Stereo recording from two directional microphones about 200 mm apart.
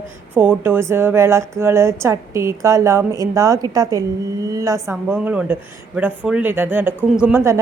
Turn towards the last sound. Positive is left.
turn(degrees=-10)  # may be behind; listen again after turning